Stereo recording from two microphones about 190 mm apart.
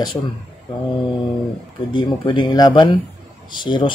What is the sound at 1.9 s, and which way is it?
Speech, 25° left (ahead or behind).